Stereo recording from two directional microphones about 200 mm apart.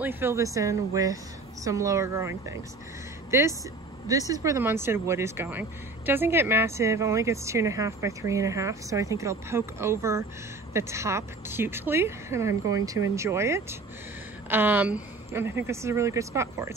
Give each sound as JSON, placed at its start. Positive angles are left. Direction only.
{"t": 0.0, "sound": "speech", "side_deg": -10}